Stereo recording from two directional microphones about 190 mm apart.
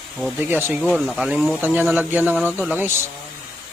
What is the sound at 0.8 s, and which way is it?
Speech, centre (ahead or behind).